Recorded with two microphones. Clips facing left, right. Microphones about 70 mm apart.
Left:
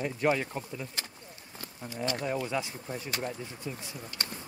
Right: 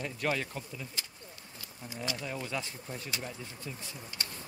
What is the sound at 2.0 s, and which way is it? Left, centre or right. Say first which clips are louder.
Speech: left 6 dB; left.